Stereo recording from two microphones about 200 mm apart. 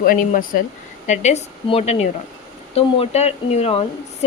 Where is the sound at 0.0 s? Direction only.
45° left (ahead or behind).